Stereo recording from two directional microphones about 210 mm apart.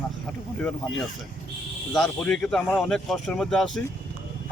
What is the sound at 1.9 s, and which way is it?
Speech, 5° left (ahead or behind).